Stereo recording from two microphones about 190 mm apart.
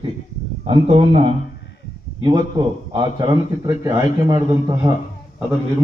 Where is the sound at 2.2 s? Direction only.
25° right (ahead or behind).